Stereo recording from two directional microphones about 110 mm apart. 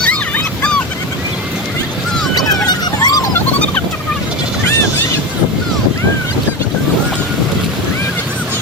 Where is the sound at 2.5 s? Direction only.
40° left (ahead or behind).